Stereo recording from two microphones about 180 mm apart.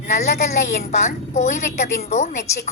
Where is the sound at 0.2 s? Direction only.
40° left (ahead or behind).